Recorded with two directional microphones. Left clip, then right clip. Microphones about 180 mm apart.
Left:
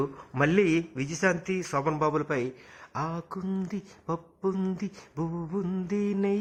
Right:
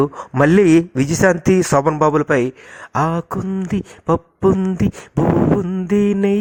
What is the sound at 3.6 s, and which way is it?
Speech, 45° right (ahead or behind).